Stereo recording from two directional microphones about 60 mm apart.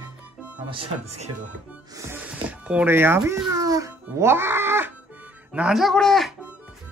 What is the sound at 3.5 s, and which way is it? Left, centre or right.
Speech, right.